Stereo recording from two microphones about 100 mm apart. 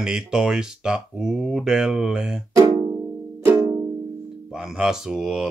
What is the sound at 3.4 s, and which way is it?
Music, 25° right (ahead or behind).